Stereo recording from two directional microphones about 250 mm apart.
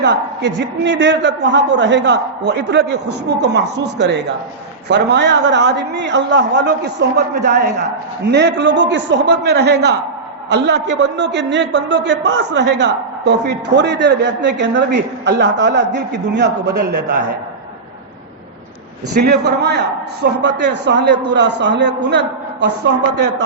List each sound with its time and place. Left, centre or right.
0.0 s a man's voice: right
19.2 s a man's voice: right